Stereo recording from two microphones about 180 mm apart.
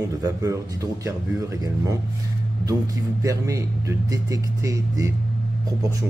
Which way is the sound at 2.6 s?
20° right (ahead or behind).